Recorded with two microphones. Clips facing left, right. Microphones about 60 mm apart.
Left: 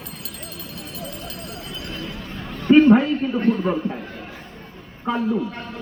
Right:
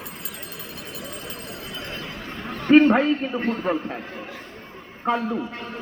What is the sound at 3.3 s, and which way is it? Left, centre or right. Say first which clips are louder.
Speech: left 5 dB; centre.